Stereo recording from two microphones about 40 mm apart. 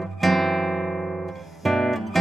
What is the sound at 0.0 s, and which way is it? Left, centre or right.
Music, centre.